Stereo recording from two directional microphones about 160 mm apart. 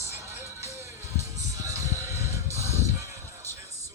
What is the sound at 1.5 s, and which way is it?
Music, 20° right (ahead or behind).